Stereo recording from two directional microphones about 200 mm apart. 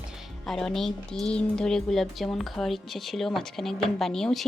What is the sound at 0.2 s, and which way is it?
Speech, centre (ahead or behind).